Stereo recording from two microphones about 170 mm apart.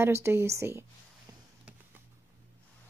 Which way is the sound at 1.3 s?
20° right (ahead or behind).